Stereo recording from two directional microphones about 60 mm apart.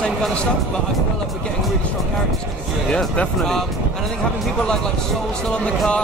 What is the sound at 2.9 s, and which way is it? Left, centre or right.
Speech, centre.